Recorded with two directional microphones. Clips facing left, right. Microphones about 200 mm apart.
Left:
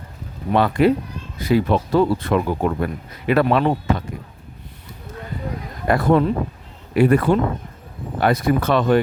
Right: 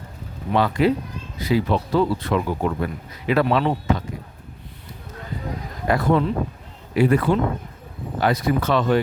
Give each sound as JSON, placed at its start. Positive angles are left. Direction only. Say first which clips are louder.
{"t": 0.5, "sound": "speech", "louder": "left 3 dB", "side_deg": 55}
{"t": 5.9, "sound": "speech", "louder": "left 3 dB", "side_deg": 50}